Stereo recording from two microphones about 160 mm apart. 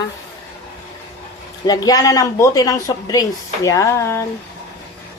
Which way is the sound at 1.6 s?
25° left (ahead or behind).